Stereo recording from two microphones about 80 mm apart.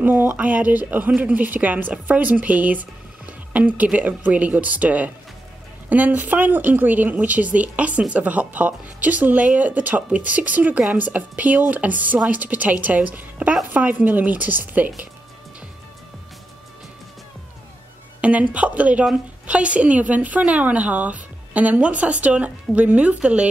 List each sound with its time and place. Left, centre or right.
0.0 s speech: right
18.2 s a woman's voice: centre